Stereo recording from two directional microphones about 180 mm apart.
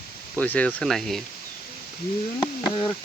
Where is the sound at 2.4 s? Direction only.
25° left (ahead or behind).